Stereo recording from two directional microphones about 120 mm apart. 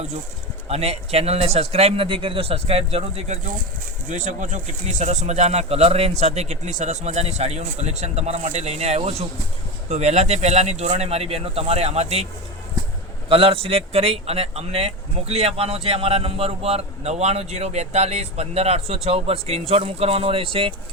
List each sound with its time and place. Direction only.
0.7 s a man's voice: 60° right (ahead or behind)
4.1 s a man's voice: 90° right; by 20.7 s 50° right (ahead or behind)